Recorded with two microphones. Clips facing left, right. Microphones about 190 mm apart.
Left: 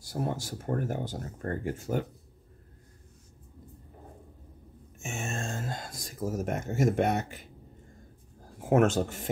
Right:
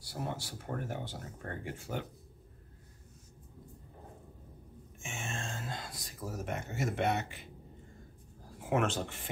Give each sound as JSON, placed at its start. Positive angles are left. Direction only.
{"t": 0.0, "sound": "speech", "side_deg": 40}
{"t": 4.9, "sound": "a sound", "side_deg": 45}
{"t": 8.5, "sound": "speech", "side_deg": 45}